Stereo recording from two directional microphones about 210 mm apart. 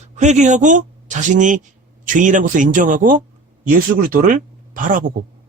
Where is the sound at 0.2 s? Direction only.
35° right (ahead or behind).